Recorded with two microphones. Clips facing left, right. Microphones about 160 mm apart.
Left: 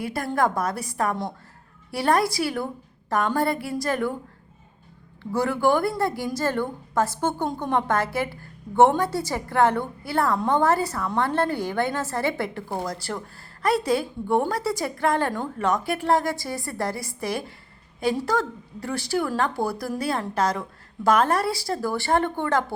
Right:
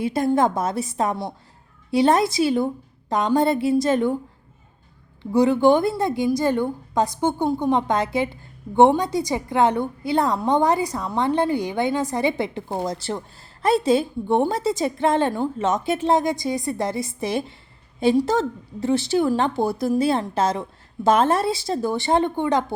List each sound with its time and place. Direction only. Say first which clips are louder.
0.0 s a woman's voice: right 5 dB; 20° right (ahead or behind)
5.2 s a woman's voice: right 6 dB; 20° right (ahead or behind)
15.3 s a woman's voice: right 5 dB; 10° right (ahead or behind)
15.6 s a woman's voice: right 1 dB; 20° right (ahead or behind)